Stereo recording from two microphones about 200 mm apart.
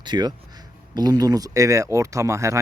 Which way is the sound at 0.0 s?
20° right (ahead or behind).